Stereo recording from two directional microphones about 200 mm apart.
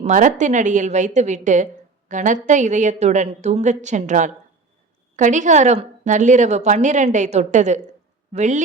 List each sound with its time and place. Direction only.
0.0 s a woman's voice: 40° right (ahead or behind)